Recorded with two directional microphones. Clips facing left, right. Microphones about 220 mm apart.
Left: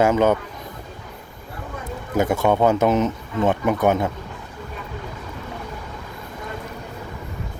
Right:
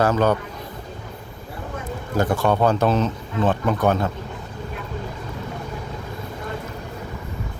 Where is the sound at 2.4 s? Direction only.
15° left (ahead or behind).